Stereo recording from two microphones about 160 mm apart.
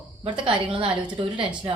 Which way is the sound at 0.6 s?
30° right (ahead or behind).